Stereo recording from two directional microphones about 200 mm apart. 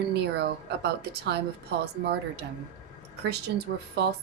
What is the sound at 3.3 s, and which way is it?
Speech, 55° right (ahead or behind).